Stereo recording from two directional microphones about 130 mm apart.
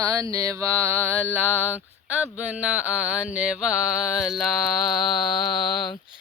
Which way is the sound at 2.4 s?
10° right (ahead or behind).